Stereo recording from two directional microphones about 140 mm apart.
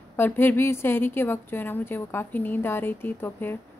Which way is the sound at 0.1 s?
15° left (ahead or behind).